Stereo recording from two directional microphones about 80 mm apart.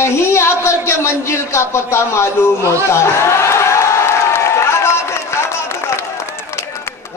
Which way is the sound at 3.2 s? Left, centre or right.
Left.